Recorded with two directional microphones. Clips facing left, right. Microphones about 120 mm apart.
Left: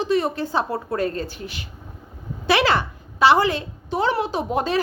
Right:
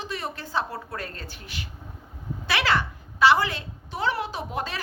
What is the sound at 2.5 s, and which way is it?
A woman's voice, 20° left (ahead or behind).